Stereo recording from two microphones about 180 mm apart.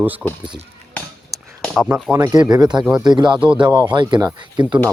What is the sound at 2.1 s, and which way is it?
Speech, 20° right (ahead or behind).